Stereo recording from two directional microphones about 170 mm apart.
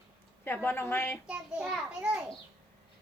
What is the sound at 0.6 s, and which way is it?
Speech, 15° left (ahead or behind).